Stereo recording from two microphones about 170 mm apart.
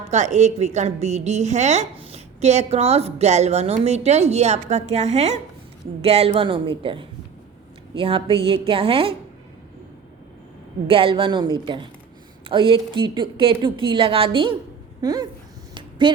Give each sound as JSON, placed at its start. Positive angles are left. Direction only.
{"t": 0.1, "sound": "a woman's voice", "side_deg": -40}
{"t": 10.8, "sound": "speech", "side_deg": -30}
{"t": 15.7, "sound": "a sound", "side_deg": -30}